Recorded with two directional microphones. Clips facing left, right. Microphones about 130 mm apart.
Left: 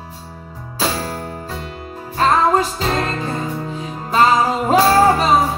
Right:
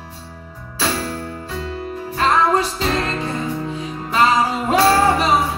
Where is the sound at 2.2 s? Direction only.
40° left (ahead or behind).